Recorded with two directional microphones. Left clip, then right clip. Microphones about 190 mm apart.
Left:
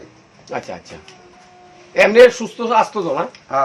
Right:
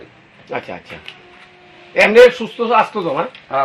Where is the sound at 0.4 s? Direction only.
30° right (ahead or behind).